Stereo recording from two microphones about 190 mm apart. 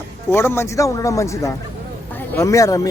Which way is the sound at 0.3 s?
10° left (ahead or behind).